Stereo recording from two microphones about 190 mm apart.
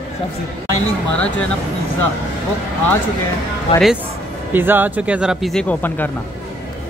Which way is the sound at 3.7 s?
30° left (ahead or behind).